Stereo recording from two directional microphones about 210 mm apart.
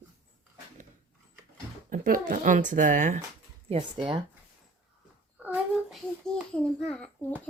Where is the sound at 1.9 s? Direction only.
40° right (ahead or behind).